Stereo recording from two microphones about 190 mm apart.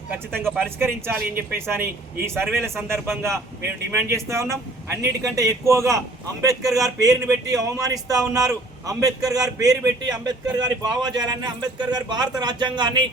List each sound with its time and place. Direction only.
0.4 s a man's voice: 10° right (ahead or behind)